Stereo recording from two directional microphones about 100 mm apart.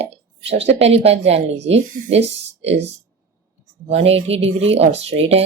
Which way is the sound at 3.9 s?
85° right.